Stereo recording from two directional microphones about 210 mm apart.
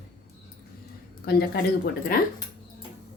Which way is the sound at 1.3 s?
50° left (ahead or behind).